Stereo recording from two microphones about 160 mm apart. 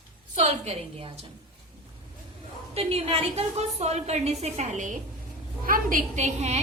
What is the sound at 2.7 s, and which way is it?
A woman's voice, 40° right (ahead or behind).